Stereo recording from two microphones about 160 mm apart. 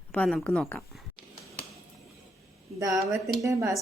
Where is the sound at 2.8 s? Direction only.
20° right (ahead or behind).